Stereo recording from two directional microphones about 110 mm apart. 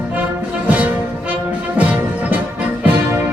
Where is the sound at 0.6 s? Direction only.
10° right (ahead or behind).